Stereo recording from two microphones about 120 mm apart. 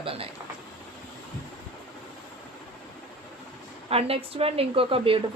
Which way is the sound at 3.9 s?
55° right (ahead or behind).